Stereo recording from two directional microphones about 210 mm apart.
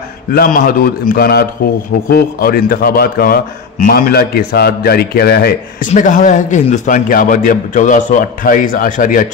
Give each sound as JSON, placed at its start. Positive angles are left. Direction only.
{"t": 0.3, "sound": "a man's voice", "side_deg": 45}
{"t": 5.9, "sound": "a man's voice", "side_deg": 35}